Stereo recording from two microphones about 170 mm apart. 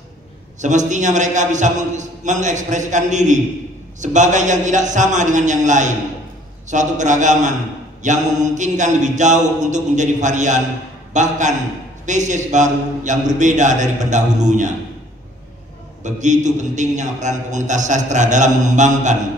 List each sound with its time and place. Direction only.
0.6 s a man's voice: 45° right (ahead or behind)
16.0 s a man's voice: 45° right (ahead or behind)